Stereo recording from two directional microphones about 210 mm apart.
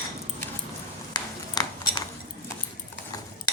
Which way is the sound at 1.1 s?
20° left (ahead or behind).